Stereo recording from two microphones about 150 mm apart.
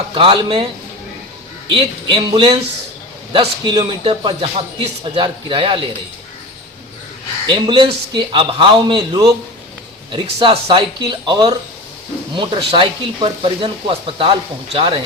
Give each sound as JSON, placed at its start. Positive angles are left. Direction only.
{"t": 0.1, "sound": "speech", "side_deg": -35}
{"t": 7.4, "sound": "speech", "side_deg": -35}